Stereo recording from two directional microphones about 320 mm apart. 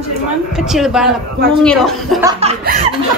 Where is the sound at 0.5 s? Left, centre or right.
Centre.